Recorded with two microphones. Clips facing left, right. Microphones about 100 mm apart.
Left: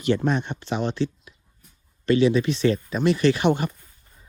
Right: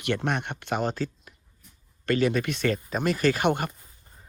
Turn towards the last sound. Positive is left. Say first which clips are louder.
# left 3 dB
turn(degrees=-50)  # may be behind; listen again after turning